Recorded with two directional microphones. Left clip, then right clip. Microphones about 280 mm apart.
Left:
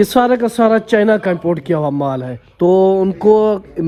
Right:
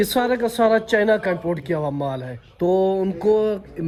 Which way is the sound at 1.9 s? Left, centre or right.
Left.